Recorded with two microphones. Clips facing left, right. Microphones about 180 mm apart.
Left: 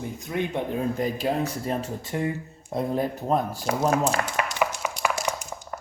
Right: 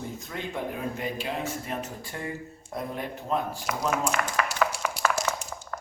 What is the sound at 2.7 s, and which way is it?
Speech, 35° left (ahead or behind).